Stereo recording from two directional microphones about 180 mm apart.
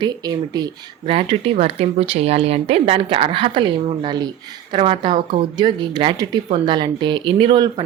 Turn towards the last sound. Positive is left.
turn(degrees=-25)  # may be behind; listen again after turning